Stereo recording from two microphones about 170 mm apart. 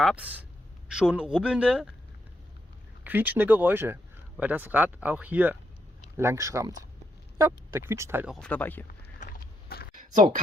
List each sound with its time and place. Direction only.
0.0 s speech: 5° right (ahead or behind)
3.0 s speech: 10° right (ahead or behind)
8.3 s speech: 5° left (ahead or behind)
9.2 s a sound: 60° left (ahead or behind)